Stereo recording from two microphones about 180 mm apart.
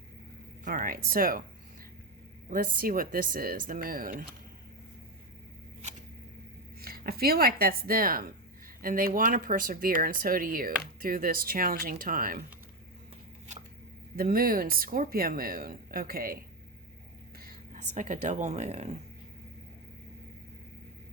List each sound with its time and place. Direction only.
0.6 s speech: 50° right (ahead or behind)
2.5 s speech: 50° right (ahead or behind)
6.8 s speech: 60° right (ahead or behind)
14.2 s speech: 55° right (ahead or behind)
17.7 s speech: 40° right (ahead or behind)